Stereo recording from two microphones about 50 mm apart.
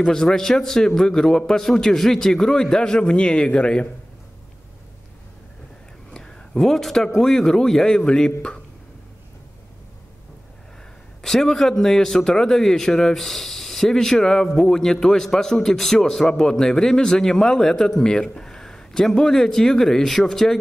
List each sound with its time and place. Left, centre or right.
0.0 s speech: centre
6.1 s a sound: centre
6.6 s speech: centre
11.2 s speech: centre